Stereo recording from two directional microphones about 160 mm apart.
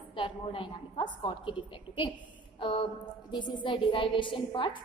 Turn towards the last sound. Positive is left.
turn(degrees=30)  # may be behind; listen again after turning